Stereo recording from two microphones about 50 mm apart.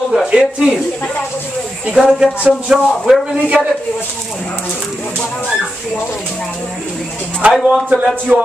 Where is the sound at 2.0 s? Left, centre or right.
Centre.